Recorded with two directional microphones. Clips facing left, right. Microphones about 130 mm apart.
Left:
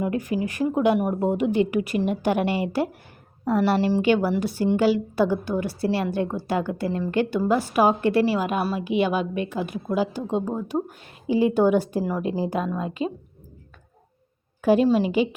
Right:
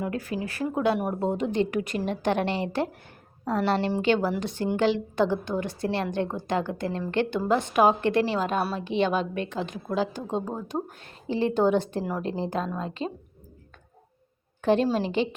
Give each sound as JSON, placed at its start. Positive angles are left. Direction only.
{"t": 0.0, "sound": "a woman's voice", "side_deg": 15}
{"t": 14.6, "sound": "a woman's voice", "side_deg": 5}